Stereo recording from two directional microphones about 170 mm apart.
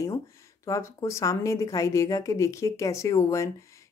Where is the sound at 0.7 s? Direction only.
20° left (ahead or behind).